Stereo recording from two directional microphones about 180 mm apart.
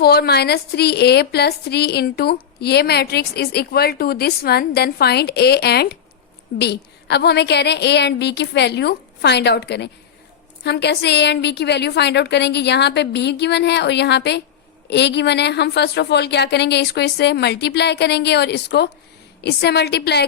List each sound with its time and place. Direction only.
0.0 s a woman's voice: 60° left (ahead or behind)